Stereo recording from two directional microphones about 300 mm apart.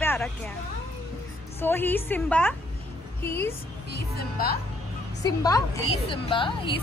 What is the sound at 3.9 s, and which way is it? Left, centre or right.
Speech, left.